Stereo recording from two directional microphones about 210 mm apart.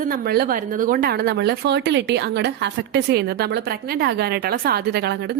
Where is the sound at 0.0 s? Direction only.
45° right (ahead or behind).